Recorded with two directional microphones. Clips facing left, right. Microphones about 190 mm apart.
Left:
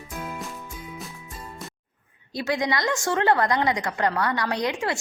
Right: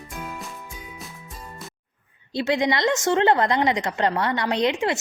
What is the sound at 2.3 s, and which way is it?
A woman's voice, 25° right (ahead or behind).